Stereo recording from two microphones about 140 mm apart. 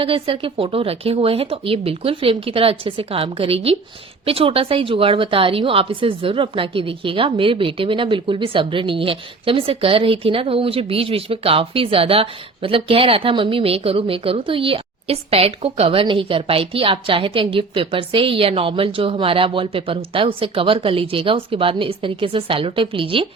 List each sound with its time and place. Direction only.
0.0 s a woman's voice: 40° right (ahead or behind)